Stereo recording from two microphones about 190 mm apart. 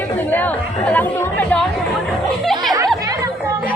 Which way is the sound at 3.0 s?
15° right (ahead or behind).